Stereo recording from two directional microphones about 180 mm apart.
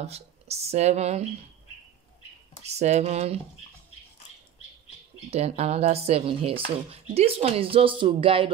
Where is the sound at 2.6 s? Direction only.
40° right (ahead or behind).